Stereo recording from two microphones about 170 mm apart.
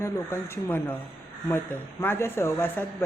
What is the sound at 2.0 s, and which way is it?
A woman's voice, 15° left (ahead or behind).